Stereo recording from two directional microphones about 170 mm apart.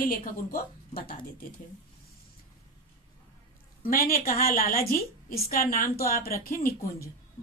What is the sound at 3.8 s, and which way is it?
Speech, 60° left (ahead or behind).